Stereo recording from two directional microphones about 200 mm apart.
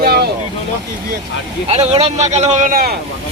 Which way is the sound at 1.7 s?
35° right (ahead or behind).